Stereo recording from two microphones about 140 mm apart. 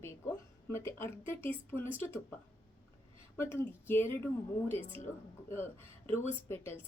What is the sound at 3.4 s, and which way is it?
Speech, 15° left (ahead or behind).